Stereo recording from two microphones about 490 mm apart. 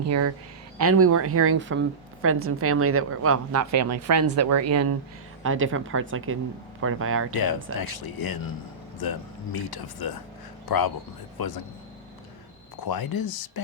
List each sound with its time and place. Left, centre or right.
0.0 s a woman's voice: right
7.3 s speech: left
12.8 s speech: left